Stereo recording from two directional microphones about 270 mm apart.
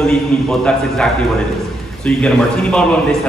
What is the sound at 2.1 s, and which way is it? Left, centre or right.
Speech, centre.